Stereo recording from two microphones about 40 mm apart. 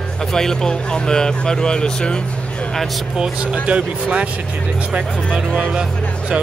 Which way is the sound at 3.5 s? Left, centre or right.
Right.